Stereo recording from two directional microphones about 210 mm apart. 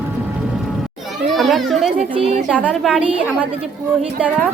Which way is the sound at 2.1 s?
30° right (ahead or behind).